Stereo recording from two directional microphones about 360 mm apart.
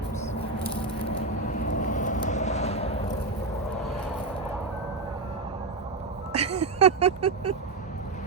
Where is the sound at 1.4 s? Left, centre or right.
Left.